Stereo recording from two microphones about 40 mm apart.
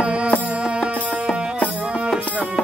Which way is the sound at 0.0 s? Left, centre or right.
Right.